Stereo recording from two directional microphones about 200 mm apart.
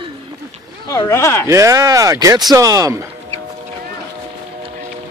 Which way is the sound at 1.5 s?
15° right (ahead or behind).